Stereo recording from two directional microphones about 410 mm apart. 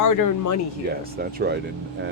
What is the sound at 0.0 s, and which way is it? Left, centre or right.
Speech, left.